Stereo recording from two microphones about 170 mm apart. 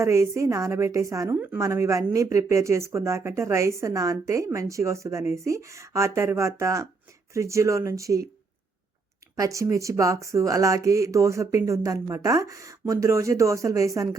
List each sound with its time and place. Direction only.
0.0 s a woman's voice: 15° right (ahead or behind)
9.3 s speech: 20° right (ahead or behind)